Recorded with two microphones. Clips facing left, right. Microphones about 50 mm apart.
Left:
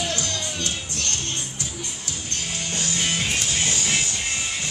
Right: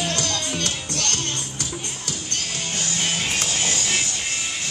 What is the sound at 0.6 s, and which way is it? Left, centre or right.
Music, right.